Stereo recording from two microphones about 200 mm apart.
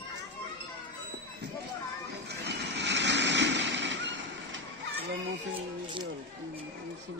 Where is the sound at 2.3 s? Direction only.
60° right (ahead or behind).